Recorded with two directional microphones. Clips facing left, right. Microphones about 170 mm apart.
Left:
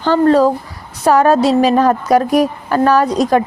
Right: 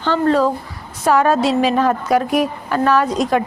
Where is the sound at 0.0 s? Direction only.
40° left (ahead or behind).